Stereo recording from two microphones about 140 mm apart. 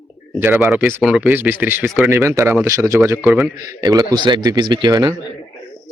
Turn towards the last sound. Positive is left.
turn(degrees=-25)  # may be behind; listen again after turning